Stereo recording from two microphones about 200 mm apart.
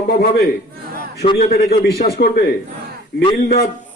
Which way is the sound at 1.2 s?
30° left (ahead or behind).